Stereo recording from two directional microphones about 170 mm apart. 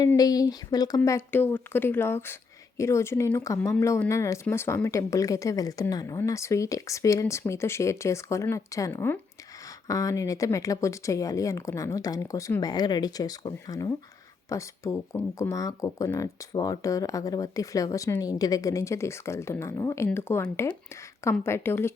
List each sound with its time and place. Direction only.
0.0 s speech: 20° left (ahead or behind)